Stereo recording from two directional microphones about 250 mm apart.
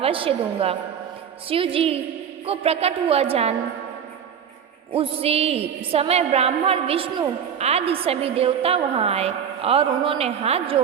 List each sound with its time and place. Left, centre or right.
0.0 s a woman's voice: right
4.9 s a woman's voice: right